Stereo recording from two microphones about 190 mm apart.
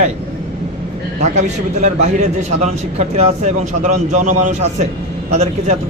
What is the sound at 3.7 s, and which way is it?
Speech, 40° right (ahead or behind).